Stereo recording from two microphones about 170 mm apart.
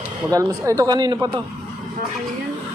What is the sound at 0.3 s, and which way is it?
Speech, 20° right (ahead or behind).